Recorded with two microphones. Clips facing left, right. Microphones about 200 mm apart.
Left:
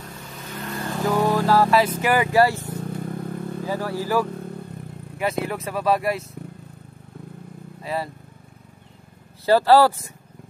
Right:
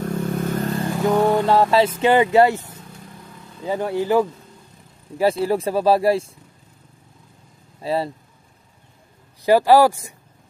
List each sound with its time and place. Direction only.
0.0 s vehicle: 55° right (ahead or behind)
0.7 s vehicle: 25° right (ahead or behind)
2.0 s speech: 25° right (ahead or behind)
2.8 s vehicle: 55° left (ahead or behind)
3.6 s speech: 25° right (ahead or behind)
4.3 s vehicle: 60° left (ahead or behind)
5.4 s speech: 30° right (ahead or behind)
7.8 s speech: 30° right (ahead or behind)
9.5 s speech: 15° right (ahead or behind)